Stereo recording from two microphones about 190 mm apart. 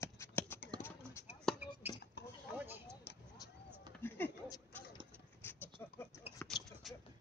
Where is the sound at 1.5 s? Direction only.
10° right (ahead or behind).